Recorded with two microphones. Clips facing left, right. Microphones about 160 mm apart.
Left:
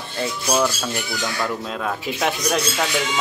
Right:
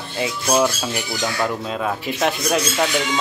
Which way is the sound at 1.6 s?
Centre (ahead or behind).